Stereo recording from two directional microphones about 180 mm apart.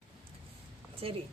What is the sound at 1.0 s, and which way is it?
Speech, 30° right (ahead or behind).